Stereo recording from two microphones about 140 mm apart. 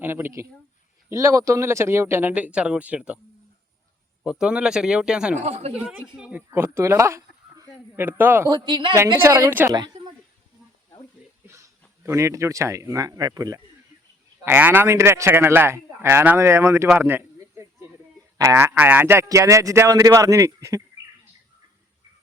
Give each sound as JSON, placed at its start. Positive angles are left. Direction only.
{"t": 0.0, "sound": "a man's voice", "side_deg": -15}
{"t": 4.2, "sound": "speech", "side_deg": -5}
{"t": 5.4, "sound": "speech", "side_deg": -55}
{"t": 5.7, "sound": "speech", "side_deg": -5}
{"t": 6.5, "sound": "a man's voice", "side_deg": -20}
{"t": 8.4, "sound": "speech", "side_deg": -30}
{"t": 9.2, "sound": "speech", "side_deg": -20}
{"t": 12.0, "sound": "speech", "side_deg": -20}
{"t": 14.4, "sound": "a man's voice", "side_deg": -15}
{"t": 17.0, "sound": "a sound", "side_deg": -15}
{"t": 18.3, "sound": "speech", "side_deg": -20}